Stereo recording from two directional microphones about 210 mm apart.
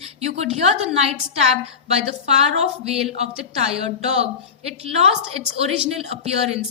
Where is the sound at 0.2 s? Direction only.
30° right (ahead or behind).